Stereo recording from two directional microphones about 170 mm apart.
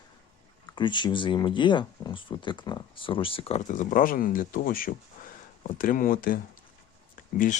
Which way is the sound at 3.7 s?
50° left (ahead or behind).